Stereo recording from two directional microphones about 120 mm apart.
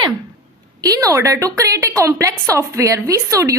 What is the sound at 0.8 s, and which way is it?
A woman's voice, 30° right (ahead or behind).